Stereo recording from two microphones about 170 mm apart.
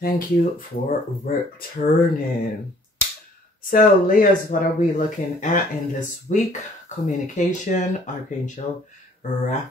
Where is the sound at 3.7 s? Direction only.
50° left (ahead or behind).